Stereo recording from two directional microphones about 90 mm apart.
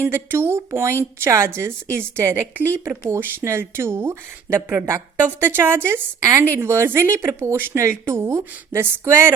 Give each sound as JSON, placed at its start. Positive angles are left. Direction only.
{"t": 0.0, "sound": "speech", "side_deg": -25}